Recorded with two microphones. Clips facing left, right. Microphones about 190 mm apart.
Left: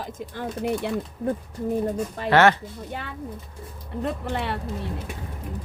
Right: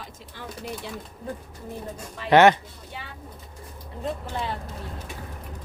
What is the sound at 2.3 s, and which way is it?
Speech, 15° right (ahead or behind).